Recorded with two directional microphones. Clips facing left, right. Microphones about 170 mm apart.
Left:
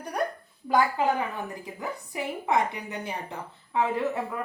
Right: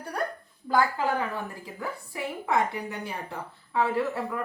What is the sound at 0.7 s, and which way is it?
A woman's voice, 20° left (ahead or behind).